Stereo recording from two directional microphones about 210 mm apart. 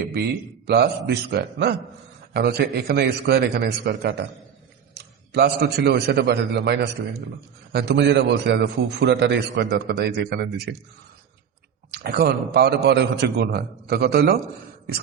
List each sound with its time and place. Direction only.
0.0 s a man's voice: 50° right (ahead or behind)
11.9 s a man's voice: 50° right (ahead or behind)